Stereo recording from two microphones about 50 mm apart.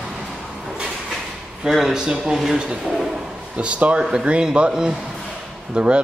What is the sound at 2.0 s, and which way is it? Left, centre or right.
Speech, centre.